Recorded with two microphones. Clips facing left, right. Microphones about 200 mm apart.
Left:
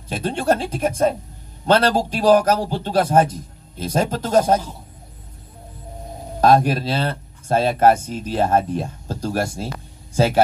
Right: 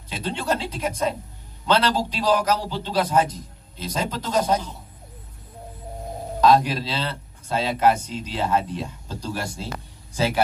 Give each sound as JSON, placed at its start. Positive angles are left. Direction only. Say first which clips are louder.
{"t": 0.1, "sound": "speech", "louder": "left 6 dB", "side_deg": 50}
{"t": 6.4, "sound": "speech", "louder": "left 3 dB", "side_deg": 50}